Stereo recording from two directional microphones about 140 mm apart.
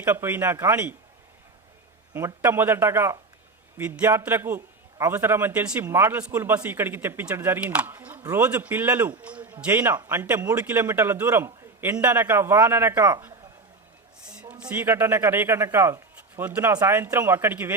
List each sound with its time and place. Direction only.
0.0 s a man's voice: 15° right (ahead or behind)
2.1 s a man's voice: 20° right (ahead or behind)
14.3 s a man's voice: 5° right (ahead or behind)